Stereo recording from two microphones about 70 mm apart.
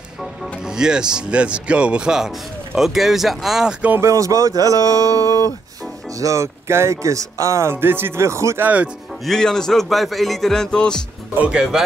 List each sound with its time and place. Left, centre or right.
0.6 s speech: centre
4.0 s speech: right
7.7 s speech: right
8.5 s speech: right
9.2 s speech: centre
11.3 s speech: centre